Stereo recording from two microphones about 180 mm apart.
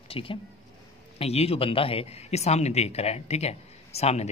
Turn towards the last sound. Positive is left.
turn(degrees=35)  # may be behind; listen again after turning